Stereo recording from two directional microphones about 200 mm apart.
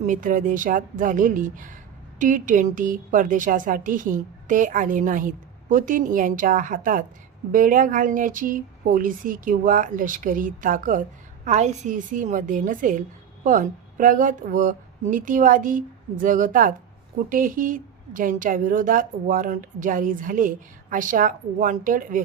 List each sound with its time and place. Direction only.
0.0 s a woman's voice: 40° right (ahead or behind)